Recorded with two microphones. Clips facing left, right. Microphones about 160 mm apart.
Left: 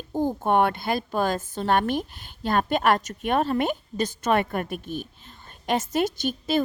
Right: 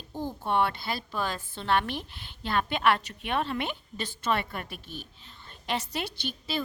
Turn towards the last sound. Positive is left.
turn(degrees=45)  # may be behind; listen again after turning